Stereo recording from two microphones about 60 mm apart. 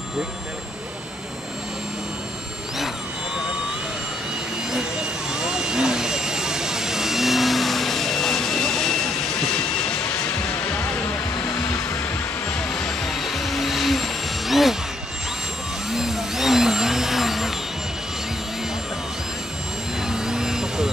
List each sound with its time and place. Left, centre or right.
5.3 s vehicle: centre
12.8 s music: centre
15.9 s a sound: centre
20.1 s vehicle: centre